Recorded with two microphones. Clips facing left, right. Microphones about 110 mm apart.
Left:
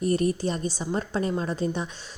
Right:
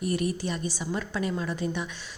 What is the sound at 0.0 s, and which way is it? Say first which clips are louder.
A woman's voice: left 4 dB; 40° left (ahead or behind).